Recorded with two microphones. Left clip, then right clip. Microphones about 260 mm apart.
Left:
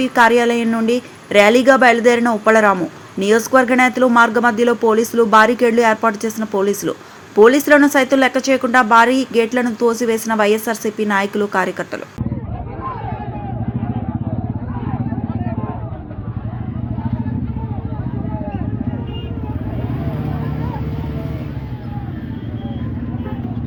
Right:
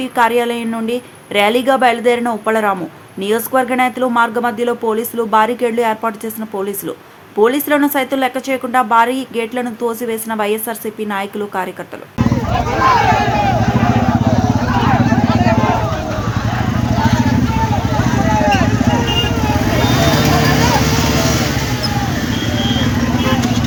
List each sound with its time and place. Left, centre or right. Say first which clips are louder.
0.0 s a woman's voice: left 2 dB; centre
12.5 s vehicle: right 18 dB; right
14.7 s vehicle: right 14 dB; right